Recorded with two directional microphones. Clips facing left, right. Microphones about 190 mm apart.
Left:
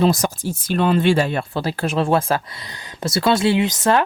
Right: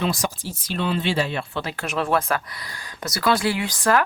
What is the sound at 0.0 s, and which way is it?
Speech, 45° left (ahead or behind).